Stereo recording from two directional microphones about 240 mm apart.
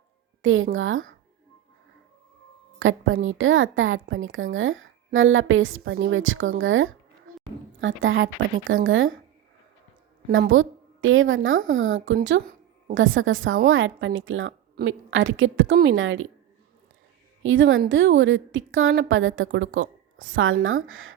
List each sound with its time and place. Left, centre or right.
0.4 s a woman's voice: right
2.7 s a woman's voice: right
10.2 s a woman's voice: right
10.5 s a woman's voice: right
17.4 s a woman's voice: right